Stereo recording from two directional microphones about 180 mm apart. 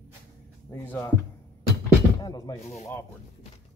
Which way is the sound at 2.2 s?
20° left (ahead or behind).